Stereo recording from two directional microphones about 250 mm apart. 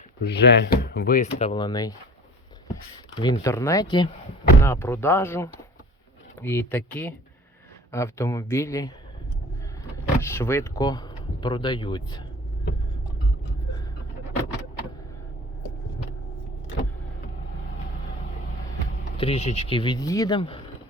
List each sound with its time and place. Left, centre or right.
0.2 s speech: left; by 1.9 s centre
3.2 s speech: centre
10.2 s speech: centre
19.1 s speech: left